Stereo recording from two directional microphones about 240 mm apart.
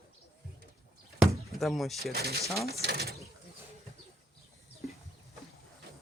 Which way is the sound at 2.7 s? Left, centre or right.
Right.